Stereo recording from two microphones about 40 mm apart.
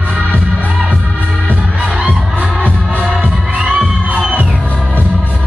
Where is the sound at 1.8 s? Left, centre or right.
Right.